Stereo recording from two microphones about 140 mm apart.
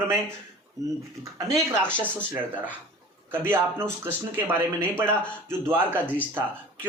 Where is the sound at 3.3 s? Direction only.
15° right (ahead or behind).